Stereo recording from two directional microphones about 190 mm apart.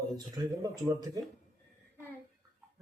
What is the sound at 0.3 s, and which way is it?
Speech, 20° right (ahead or behind).